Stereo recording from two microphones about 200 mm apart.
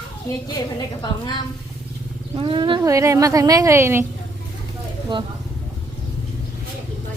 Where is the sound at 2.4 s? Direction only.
25° right (ahead or behind).